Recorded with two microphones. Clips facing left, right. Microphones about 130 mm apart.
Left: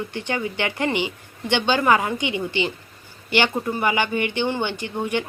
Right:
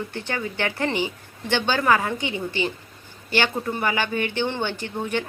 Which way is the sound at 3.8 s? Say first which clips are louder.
Left 3 dB; 15° left (ahead or behind).